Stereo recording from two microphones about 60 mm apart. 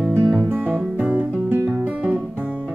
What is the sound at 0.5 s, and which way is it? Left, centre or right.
Music, right.